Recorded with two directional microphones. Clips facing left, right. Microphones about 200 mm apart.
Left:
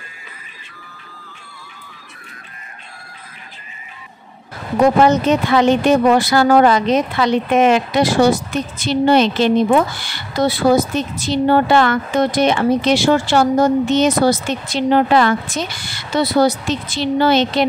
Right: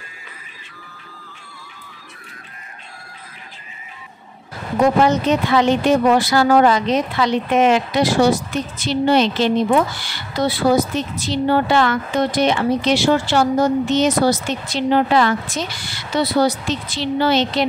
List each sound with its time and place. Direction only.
5.0 s a woman's voice: 50° left (ahead or behind)